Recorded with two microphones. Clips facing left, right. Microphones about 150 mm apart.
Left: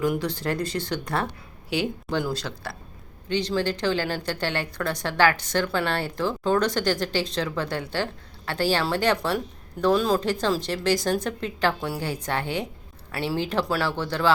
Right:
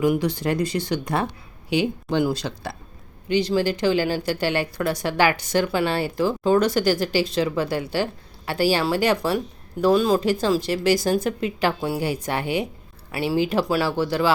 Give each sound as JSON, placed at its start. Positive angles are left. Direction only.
{"t": 0.0, "sound": "speech", "side_deg": -10}